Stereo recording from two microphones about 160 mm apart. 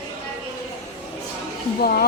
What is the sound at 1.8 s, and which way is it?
Speech, 70° left (ahead or behind).